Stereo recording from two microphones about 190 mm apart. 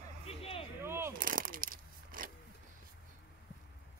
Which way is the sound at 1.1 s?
45° right (ahead or behind).